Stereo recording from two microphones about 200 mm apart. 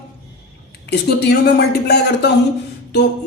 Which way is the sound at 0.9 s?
55° left (ahead or behind).